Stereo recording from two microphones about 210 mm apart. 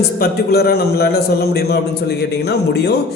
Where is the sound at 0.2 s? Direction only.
50° left (ahead or behind).